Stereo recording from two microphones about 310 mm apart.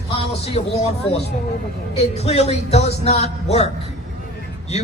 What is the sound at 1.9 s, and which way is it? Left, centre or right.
Speech, centre.